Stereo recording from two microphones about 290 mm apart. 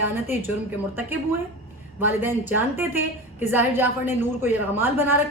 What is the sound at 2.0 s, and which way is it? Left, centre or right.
Speech, centre.